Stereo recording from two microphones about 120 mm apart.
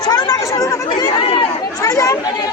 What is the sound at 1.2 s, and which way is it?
Speech, 55° left (ahead or behind).